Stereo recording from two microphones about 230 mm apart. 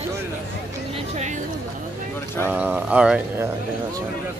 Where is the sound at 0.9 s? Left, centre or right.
Right.